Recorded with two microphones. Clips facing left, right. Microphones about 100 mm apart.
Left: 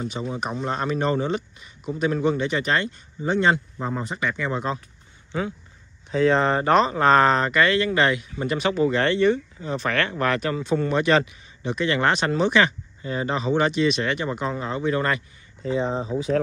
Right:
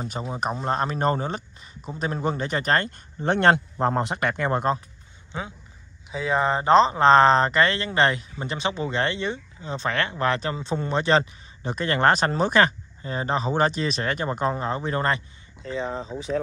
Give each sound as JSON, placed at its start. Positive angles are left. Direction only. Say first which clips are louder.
{"t": 0.0, "sound": "speech", "louder": "even", "side_deg": -35}
{"t": 5.3, "sound": "speech", "louder": "left 6 dB", "side_deg": -25}
{"t": 6.1, "sound": "speech", "louder": "left 4 dB", "side_deg": -10}